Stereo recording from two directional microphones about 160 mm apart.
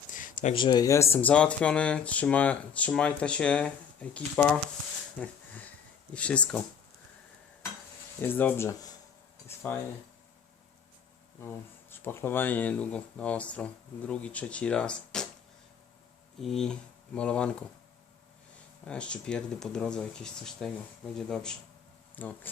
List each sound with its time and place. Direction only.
0.1 s a sound: 55° left (ahead or behind)
0.5 s speech: 25° left (ahead or behind); by 6.6 s 5° left (ahead or behind)
8.2 s speech: 10° left (ahead or behind)
9.5 s a sound: 15° left (ahead or behind)
11.4 s speech: 15° left (ahead or behind)
16.4 s speech: centre (ahead or behind)
18.9 s speech: 5° left (ahead or behind)